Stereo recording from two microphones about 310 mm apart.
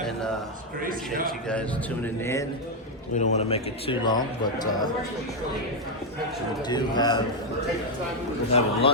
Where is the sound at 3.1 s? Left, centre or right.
Left.